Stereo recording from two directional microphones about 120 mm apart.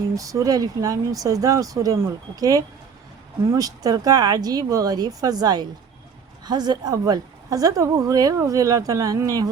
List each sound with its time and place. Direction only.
0.2 s a woman's voice: 30° right (ahead or behind)